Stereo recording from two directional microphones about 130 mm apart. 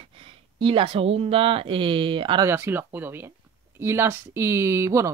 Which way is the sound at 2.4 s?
15° right (ahead or behind).